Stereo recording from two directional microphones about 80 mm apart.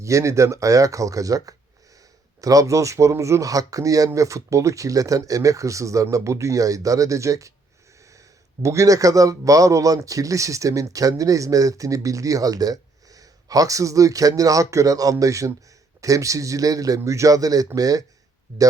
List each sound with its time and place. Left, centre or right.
0.0 s speech: right
8.6 s speech: right
18.5 s speech: right